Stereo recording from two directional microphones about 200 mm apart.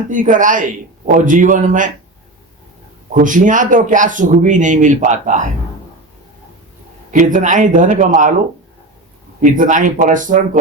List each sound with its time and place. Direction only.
0.1 s speech: 40° right (ahead or behind)
3.2 s speech: 40° right (ahead or behind)
7.1 s speech: 40° right (ahead or behind)
9.4 s speech: 40° right (ahead or behind)